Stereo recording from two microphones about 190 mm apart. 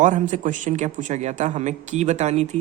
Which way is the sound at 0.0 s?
40° right (ahead or behind).